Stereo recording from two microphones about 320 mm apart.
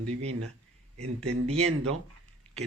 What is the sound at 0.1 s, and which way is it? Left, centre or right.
Speech, centre.